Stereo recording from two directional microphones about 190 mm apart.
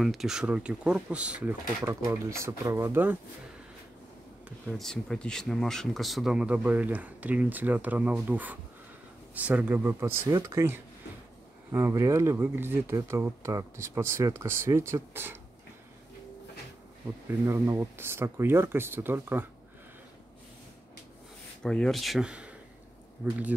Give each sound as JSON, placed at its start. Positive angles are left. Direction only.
{"t": 0.0, "sound": "speech", "side_deg": 0}
{"t": 4.5, "sound": "speech", "side_deg": -5}
{"t": 17.5, "sound": "speech", "side_deg": -15}
{"t": 21.6, "sound": "speech", "side_deg": 5}